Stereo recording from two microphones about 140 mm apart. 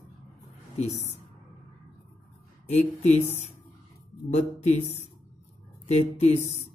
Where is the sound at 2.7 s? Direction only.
50° left (ahead or behind).